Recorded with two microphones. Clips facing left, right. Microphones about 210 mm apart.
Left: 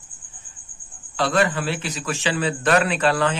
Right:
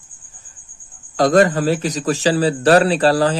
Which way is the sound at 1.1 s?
40° right (ahead or behind).